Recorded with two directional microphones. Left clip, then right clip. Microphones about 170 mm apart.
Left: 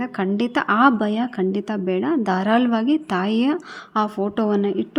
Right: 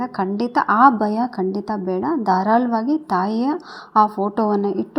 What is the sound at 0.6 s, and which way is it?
A woman's voice, 30° left (ahead or behind).